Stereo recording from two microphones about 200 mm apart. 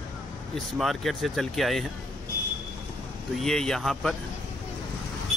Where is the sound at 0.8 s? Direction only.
Centre (ahead or behind).